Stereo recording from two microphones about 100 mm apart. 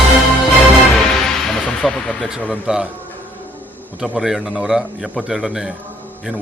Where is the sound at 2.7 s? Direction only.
5° right (ahead or behind).